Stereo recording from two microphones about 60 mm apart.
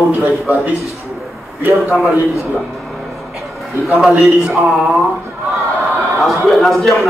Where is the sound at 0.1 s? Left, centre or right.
Right.